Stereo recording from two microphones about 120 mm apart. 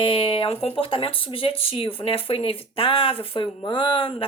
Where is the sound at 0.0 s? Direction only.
45° left (ahead or behind).